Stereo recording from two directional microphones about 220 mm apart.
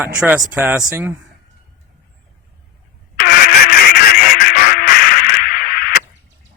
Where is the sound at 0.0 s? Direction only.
5° right (ahead or behind).